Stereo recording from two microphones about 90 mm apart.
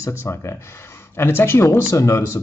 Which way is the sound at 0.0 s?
30° left (ahead or behind).